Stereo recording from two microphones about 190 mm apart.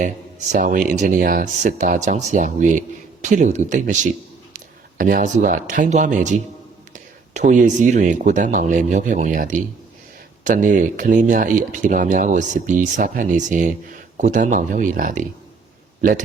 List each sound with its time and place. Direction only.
0.0 s a man's voice: 45° right (ahead or behind)